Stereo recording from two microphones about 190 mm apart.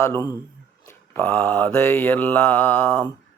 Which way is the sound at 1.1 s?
5° left (ahead or behind).